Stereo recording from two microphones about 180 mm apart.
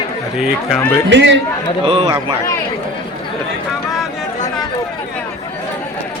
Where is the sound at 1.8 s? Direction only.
30° right (ahead or behind).